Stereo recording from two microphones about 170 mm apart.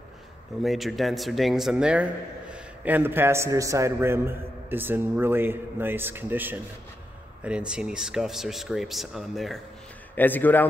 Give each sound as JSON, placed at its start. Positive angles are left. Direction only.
{"t": 0.6, "sound": "a man's voice", "side_deg": 0}
{"t": 10.1, "sound": "a man's voice", "side_deg": 10}